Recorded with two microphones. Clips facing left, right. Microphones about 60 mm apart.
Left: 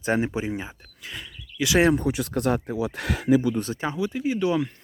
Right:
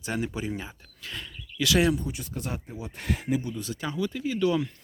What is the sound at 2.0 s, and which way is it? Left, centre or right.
Speech, left.